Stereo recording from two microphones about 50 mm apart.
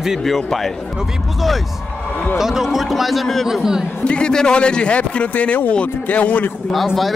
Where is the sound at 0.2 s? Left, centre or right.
Centre.